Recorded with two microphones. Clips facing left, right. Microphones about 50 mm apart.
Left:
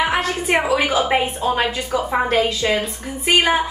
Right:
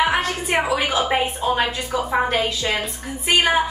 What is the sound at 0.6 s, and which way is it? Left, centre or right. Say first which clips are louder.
A woman's voice: left 2 dB; centre.